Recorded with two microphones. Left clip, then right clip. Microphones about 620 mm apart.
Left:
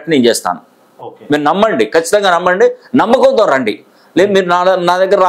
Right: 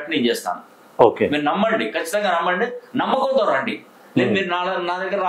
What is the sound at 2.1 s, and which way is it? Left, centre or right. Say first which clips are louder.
A man's voice: left 6 dB; left.